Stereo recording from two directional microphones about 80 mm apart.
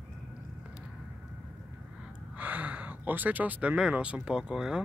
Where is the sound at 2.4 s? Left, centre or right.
Right.